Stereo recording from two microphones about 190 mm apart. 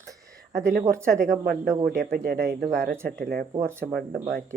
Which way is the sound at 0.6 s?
55° right (ahead or behind).